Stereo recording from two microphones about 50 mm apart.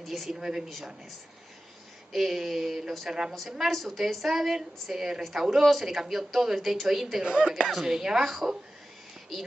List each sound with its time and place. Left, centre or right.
0.0 s speech: centre
2.1 s a woman's voice: centre
3.1 s speech: centre
3.4 s a woman's voice: centre
7.2 s speech: centre
7.6 s speech: centre